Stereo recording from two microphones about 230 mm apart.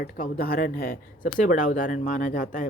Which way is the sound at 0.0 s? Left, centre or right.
Left.